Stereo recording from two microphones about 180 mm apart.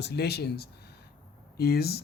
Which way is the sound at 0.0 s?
65° left (ahead or behind).